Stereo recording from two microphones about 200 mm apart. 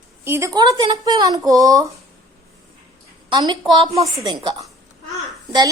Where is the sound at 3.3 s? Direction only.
20° right (ahead or behind).